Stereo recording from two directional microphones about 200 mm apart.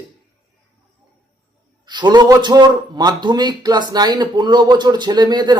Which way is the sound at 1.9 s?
20° right (ahead or behind).